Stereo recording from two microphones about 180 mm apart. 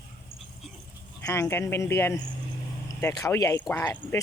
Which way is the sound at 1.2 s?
15° left (ahead or behind).